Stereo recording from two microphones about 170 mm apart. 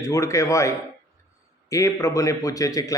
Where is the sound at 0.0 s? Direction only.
15° left (ahead or behind).